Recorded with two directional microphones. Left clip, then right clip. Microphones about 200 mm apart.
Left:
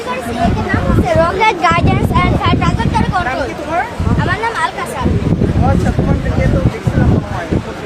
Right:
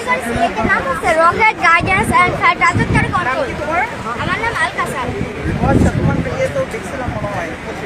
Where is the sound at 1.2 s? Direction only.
35° left (ahead or behind).